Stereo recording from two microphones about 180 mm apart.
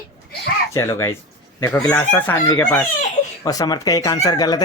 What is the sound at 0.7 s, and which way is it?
Speech, 15° left (ahead or behind).